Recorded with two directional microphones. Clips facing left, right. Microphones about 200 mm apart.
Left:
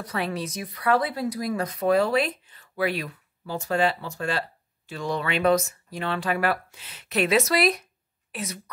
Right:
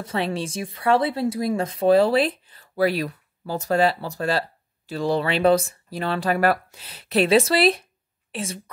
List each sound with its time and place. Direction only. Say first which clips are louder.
0.0 s a woman's voice: right 3 dB; 25° right (ahead or behind)